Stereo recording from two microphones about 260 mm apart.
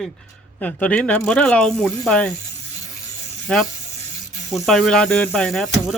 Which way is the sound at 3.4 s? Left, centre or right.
Centre.